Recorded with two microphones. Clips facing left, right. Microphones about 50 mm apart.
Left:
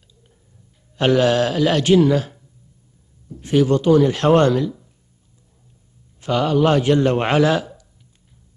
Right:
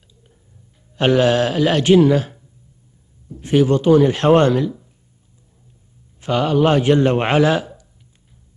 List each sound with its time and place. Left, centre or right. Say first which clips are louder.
0.9 s a man's voice: right 1 dB; right
3.3 s a man's voice: right 1 dB; right
6.2 s a man's voice: right 1 dB; right